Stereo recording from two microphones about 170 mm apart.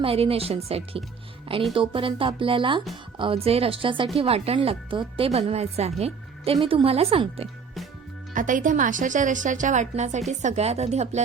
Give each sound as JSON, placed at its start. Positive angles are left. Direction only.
{"t": 0.0, "sound": "a woman's voice", "side_deg": -35}
{"t": 8.3, "sound": "a woman's voice", "side_deg": -50}